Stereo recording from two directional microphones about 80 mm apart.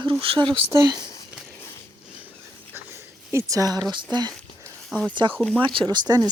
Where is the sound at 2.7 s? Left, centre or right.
Right.